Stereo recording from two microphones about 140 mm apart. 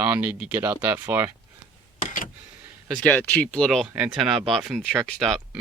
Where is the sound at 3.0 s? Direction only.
10° left (ahead or behind).